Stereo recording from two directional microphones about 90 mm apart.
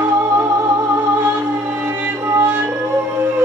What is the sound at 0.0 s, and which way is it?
Music, 25° right (ahead or behind).